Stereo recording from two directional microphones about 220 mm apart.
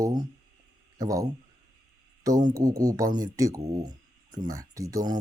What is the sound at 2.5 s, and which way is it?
Speech, 15° right (ahead or behind).